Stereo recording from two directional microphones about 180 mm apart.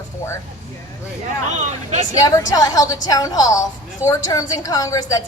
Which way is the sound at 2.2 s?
20° left (ahead or behind).